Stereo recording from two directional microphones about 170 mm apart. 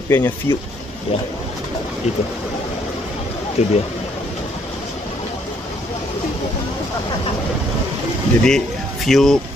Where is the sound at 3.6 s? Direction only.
40° left (ahead or behind).